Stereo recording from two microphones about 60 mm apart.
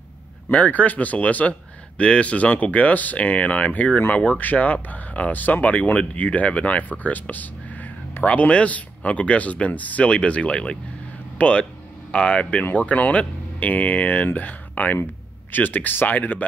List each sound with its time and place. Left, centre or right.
0.5 s speech: left